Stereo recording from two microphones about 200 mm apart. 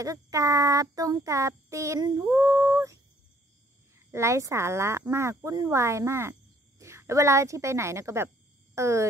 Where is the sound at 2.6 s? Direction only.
15° right (ahead or behind).